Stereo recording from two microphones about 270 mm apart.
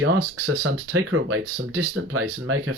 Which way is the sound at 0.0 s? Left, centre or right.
Right.